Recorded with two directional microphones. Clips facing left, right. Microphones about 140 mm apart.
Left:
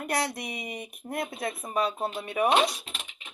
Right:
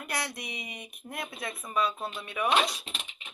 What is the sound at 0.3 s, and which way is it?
Speech, 50° left (ahead or behind).